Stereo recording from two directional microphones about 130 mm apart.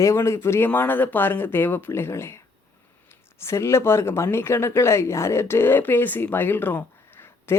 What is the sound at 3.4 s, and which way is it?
Speech, 20° left (ahead or behind).